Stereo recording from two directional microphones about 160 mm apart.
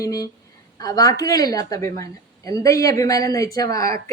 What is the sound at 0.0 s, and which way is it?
Speech, 20° left (ahead or behind).